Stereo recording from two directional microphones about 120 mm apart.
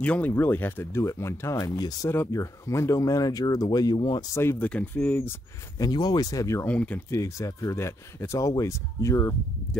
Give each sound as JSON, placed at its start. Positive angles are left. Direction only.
{"t": 0.0, "sound": "speech", "side_deg": 10}
{"t": 4.4, "sound": "speech", "side_deg": 20}
{"t": 5.8, "sound": "speech", "side_deg": 35}
{"t": 6.7, "sound": "speech", "side_deg": 10}
{"t": 7.1, "sound": "speech", "side_deg": 25}